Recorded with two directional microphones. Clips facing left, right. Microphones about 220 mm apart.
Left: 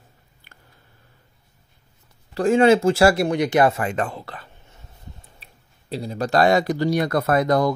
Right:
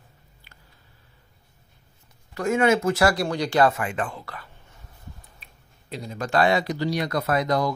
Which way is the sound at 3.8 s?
40° left (ahead or behind).